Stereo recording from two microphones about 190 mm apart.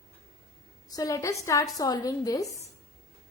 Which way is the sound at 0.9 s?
20° left (ahead or behind).